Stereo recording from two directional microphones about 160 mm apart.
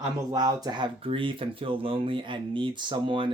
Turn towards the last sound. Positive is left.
turn(degrees=-30)  # may be behind; listen again after turning